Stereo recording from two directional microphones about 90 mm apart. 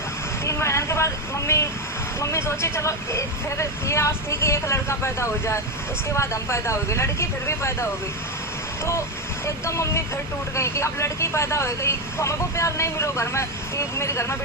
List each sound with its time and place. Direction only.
0.4 s speech: 35° left (ahead or behind)